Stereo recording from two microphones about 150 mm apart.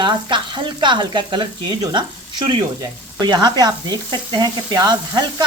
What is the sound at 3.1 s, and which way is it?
Speech, 30° right (ahead or behind).